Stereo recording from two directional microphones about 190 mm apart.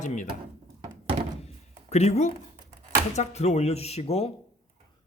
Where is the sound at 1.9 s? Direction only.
35° left (ahead or behind).